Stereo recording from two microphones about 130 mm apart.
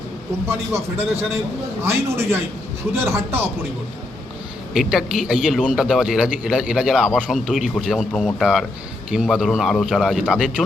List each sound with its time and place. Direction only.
0.4 s a man's voice: 20° right (ahead or behind)
4.7 s a man's voice: 5° right (ahead or behind)